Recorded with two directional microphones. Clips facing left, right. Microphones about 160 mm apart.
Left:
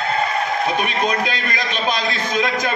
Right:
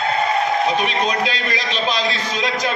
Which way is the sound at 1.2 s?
50° left (ahead or behind).